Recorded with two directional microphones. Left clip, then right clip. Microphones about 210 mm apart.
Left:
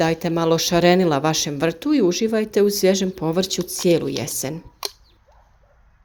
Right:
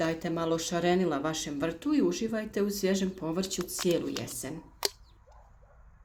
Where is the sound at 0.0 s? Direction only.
40° left (ahead or behind).